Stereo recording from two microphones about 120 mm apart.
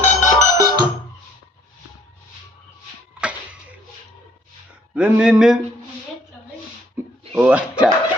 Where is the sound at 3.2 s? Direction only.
10° right (ahead or behind).